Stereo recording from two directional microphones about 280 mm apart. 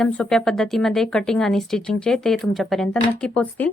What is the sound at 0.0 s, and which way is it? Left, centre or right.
Speech, centre.